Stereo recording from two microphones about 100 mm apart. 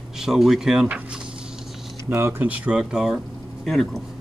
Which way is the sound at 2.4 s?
15° right (ahead or behind).